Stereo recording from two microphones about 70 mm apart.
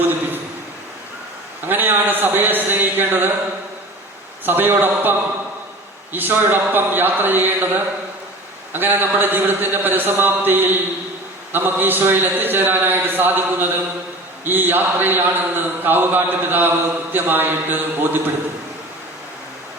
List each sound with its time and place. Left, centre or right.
1.6 s a sound: right
4.4 s a man's voice: right
6.1 s a man's voice: right
8.7 s a man's voice: right